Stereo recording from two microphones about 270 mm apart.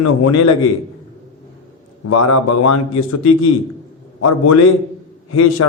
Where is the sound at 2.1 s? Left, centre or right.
Left.